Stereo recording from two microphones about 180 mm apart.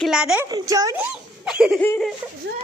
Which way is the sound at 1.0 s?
5° right (ahead or behind).